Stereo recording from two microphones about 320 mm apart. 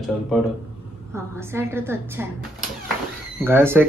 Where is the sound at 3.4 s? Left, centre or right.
Centre.